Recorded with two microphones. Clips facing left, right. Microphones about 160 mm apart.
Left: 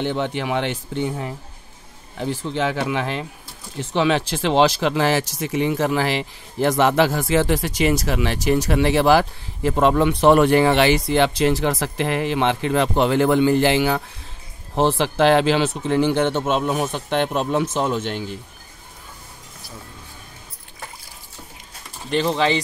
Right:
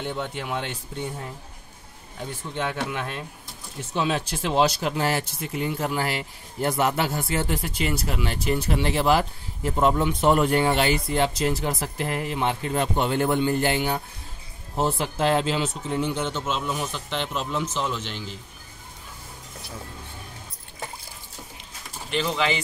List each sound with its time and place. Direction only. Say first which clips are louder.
0.0 s speech: left 7 dB; 85° left; by 18.4 s 55° left (ahead or behind)
22.1 s speech: left 5 dB; 35° left (ahead or behind)